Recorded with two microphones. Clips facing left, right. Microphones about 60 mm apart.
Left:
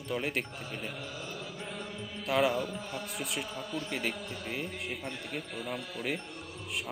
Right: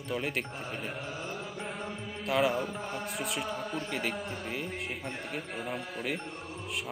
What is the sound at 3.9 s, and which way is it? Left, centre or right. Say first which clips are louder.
Speech: even; centre.